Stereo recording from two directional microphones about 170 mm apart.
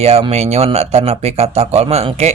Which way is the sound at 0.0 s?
40° right (ahead or behind).